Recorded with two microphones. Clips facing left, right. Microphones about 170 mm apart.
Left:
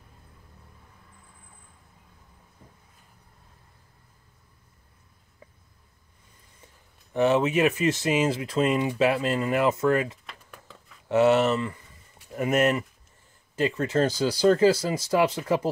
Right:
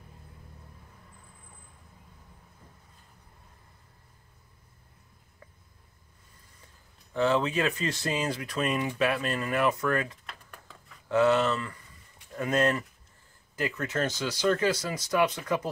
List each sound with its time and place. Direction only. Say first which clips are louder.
7.2 s speech: left 4 dB; 20° left (ahead or behind)